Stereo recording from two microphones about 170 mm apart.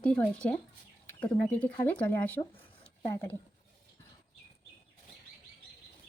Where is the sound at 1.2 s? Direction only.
25° left (ahead or behind).